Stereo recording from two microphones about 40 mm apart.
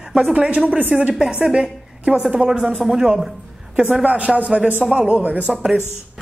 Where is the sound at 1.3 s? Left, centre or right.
Right.